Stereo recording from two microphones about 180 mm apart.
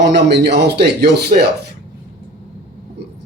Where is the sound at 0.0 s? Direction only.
70° right (ahead or behind).